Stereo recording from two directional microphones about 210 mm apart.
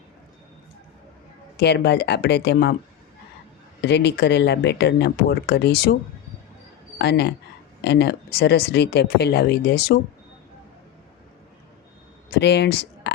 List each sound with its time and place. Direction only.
1.5 s a woman's voice: 50° left (ahead or behind)
3.8 s a woman's voice: 55° left (ahead or behind)
7.0 s a woman's voice: 50° left (ahead or behind)
12.3 s speech: 50° left (ahead or behind)